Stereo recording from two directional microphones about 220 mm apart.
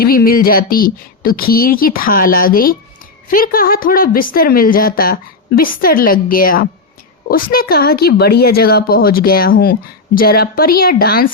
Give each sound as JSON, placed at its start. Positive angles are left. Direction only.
{"t": 0.0, "sound": "speech", "side_deg": 40}